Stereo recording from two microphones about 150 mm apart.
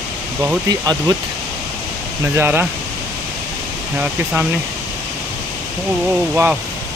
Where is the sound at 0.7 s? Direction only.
25° right (ahead or behind).